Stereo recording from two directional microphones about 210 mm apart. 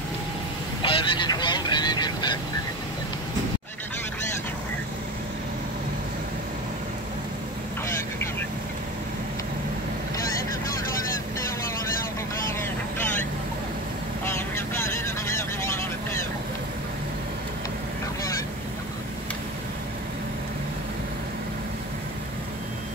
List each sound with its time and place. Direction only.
0.8 s vehicle: 25° left (ahead or behind)
14.2 s vehicle: 10° left (ahead or behind)